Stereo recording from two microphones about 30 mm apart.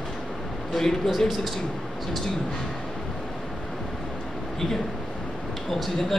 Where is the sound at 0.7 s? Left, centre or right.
Centre.